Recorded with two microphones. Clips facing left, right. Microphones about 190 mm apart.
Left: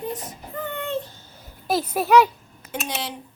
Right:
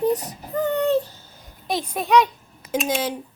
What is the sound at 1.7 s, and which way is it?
Speech, 5° left (ahead or behind).